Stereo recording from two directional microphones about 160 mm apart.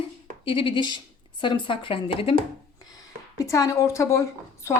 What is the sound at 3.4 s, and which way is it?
A woman's voice, 20° left (ahead or behind).